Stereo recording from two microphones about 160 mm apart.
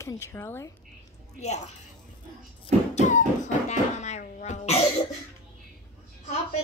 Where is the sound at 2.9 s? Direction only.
50° left (ahead or behind).